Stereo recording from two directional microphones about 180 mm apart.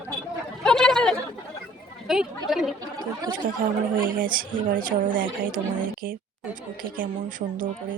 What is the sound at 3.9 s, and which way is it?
Speech, 50° right (ahead or behind).